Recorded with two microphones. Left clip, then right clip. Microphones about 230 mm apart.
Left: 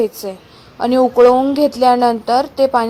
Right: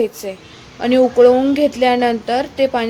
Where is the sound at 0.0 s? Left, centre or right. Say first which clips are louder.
Left 1 dB; centre.